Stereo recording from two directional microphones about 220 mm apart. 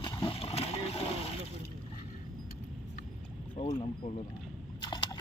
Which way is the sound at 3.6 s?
30° left (ahead or behind).